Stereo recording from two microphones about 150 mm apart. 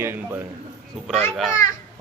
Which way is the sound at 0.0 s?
15° right (ahead or behind).